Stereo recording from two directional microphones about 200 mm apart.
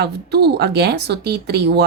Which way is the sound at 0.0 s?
55° right (ahead or behind).